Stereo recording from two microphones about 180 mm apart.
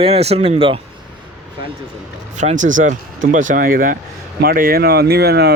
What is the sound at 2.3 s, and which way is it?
Speech, 45° right (ahead or behind).